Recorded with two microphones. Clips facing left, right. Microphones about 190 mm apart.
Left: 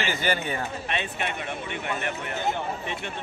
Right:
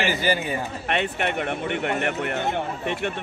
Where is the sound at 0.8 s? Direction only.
60° right (ahead or behind).